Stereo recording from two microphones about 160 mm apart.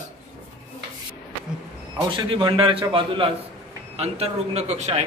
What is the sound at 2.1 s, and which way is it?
A man's voice, 30° right (ahead or behind).